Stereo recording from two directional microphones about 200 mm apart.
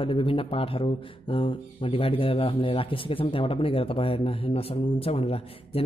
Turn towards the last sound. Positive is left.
turn(degrees=30)  # may be behind; listen again after turning